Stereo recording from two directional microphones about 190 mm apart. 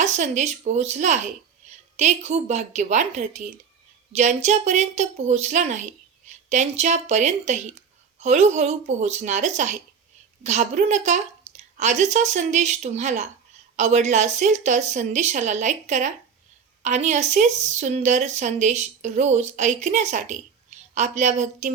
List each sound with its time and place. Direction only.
0.0 s speech: 40° right (ahead or behind)